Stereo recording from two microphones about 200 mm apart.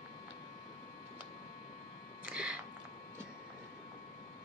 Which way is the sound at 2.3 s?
5° right (ahead or behind).